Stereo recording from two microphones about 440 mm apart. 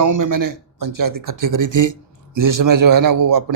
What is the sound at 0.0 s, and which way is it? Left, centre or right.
A man's voice, right.